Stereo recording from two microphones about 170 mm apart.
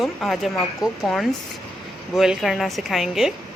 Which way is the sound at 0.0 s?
Centre (ahead or behind).